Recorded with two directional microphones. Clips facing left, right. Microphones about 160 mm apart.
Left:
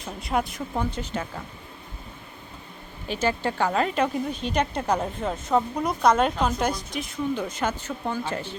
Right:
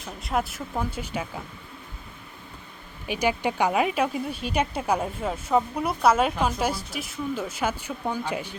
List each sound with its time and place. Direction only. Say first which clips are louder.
0.0 s speech: left 1 dB; centre (ahead or behind)
3.1 s speech: right 1 dB; 15° right (ahead or behind)